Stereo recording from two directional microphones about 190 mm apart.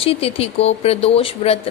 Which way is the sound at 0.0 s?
30° left (ahead or behind).